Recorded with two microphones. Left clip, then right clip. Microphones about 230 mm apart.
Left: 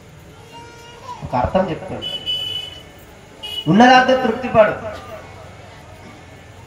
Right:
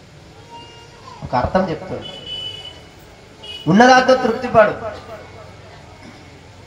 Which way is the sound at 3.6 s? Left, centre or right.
Right.